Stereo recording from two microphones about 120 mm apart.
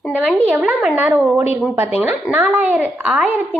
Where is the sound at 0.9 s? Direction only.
15° right (ahead or behind).